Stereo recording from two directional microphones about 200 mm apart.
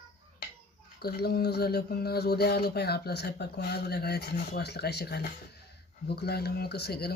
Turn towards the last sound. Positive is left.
turn(degrees=55)  # may be behind; listen again after turning